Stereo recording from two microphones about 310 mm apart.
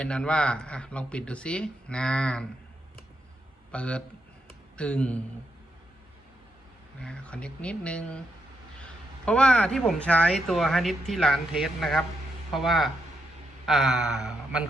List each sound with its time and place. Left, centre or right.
0.0 s speech: centre
3.7 s a man's voice: centre
7.0 s speech: centre
9.2 s speech: centre